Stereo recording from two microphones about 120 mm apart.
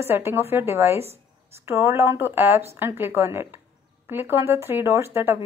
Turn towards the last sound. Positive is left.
turn(degrees=-20)  # may be behind; listen again after turning